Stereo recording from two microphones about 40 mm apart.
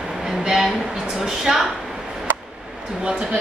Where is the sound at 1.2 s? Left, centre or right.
Centre.